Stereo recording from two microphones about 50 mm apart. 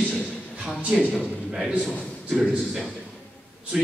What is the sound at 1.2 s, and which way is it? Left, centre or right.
A man's voice, centre.